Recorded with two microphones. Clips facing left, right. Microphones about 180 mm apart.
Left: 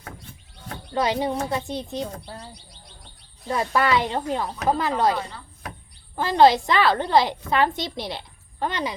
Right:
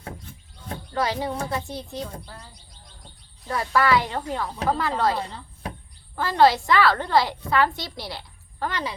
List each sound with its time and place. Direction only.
0.9 s a woman's voice: 20° left (ahead or behind)
2.6 s bird: 70° left (ahead or behind)
3.4 s a woman's voice: 20° left (ahead or behind)
5.1 s speech: 30° right (ahead or behind)
6.1 s a woman's voice: 20° left (ahead or behind)